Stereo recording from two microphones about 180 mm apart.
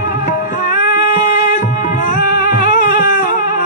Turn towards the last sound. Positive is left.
turn(degrees=45)  # may be behind; listen again after turning